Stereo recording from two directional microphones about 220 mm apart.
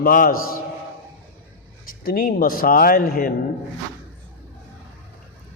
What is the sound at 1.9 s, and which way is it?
A man's voice, 40° left (ahead or behind).